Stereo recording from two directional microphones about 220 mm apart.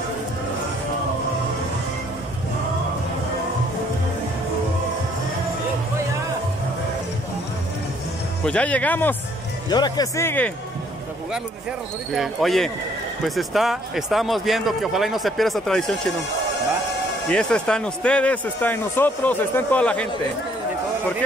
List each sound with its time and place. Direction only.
8.5 s speech: 5° left (ahead or behind)
9.7 s speech: 20° left (ahead or behind)
12.1 s speech: centre (ahead or behind)
17.3 s speech: 5° left (ahead or behind)